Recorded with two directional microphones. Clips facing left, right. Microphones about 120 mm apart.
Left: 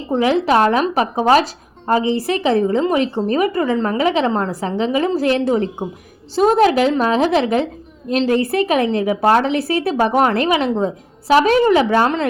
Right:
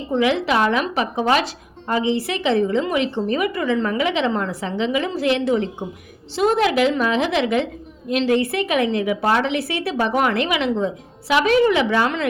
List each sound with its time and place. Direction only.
0.1 s speech: 40° left (ahead or behind)